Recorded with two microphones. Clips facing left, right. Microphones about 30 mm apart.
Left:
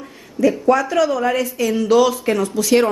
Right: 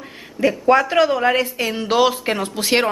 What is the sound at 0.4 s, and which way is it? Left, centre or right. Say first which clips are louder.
A woman's voice: even; right.